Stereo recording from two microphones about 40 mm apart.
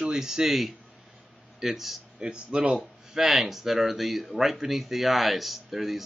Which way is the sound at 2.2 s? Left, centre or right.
Centre.